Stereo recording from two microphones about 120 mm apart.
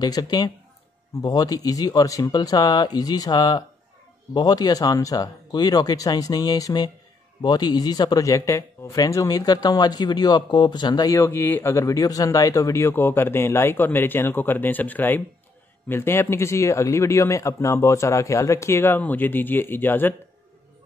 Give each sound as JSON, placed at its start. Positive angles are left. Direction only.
{"t": 0.0, "sound": "speech", "side_deg": 35}
{"t": 11.1, "sound": "speech", "side_deg": 20}